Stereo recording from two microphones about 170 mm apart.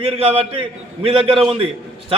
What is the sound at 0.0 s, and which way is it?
A man's voice, 35° right (ahead or behind).